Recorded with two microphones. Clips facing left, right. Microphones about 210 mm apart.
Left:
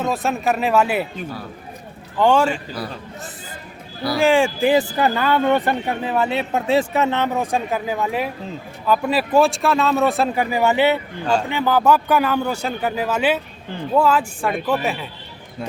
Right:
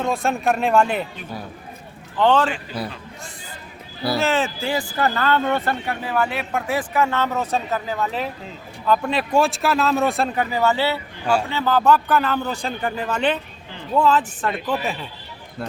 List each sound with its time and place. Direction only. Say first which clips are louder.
0.0 s speech: even; 5° left (ahead or behind)
2.1 s speech: left 2 dB; 10° left (ahead or behind)
4.2 s speech: left 9 dB; 10° left (ahead or behind)
10.4 s speech: left 4 dB; 15° left (ahead or behind)